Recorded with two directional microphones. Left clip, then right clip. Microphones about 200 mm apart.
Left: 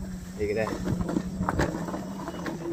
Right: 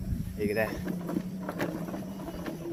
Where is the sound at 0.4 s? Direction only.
15° right (ahead or behind).